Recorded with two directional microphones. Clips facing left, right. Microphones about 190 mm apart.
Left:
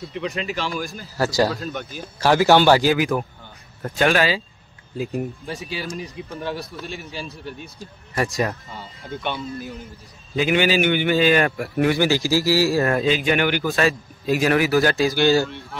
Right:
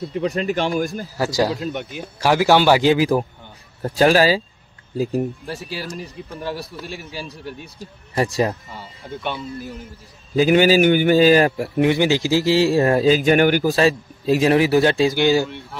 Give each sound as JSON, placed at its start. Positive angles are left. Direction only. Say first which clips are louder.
{"t": 0.1, "sound": "speech", "louder": "right 5 dB", "side_deg": -45}
{"t": 1.1, "sound": "speech", "louder": "left 1 dB", "side_deg": -15}
{"t": 2.8, "sound": "a man's voice", "louder": "right 4 dB", "side_deg": -25}
{"t": 5.5, "sound": "speech", "louder": "even", "side_deg": 0}
{"t": 8.1, "sound": "speech", "louder": "right 3 dB", "side_deg": -30}
{"t": 8.7, "sound": "speech", "louder": "even", "side_deg": -5}
{"t": 10.3, "sound": "a man's voice", "louder": "right 5 dB", "side_deg": -40}